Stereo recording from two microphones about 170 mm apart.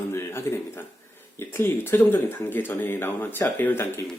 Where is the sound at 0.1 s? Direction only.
15° left (ahead or behind).